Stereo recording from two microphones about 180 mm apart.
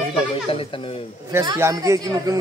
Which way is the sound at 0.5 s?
30° left (ahead or behind).